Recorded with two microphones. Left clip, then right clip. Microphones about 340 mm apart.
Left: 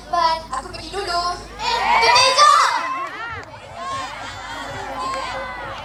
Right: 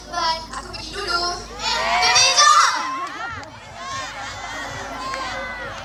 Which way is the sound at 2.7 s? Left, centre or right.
Left.